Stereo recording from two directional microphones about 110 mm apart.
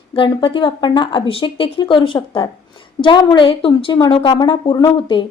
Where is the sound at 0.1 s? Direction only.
50° left (ahead or behind).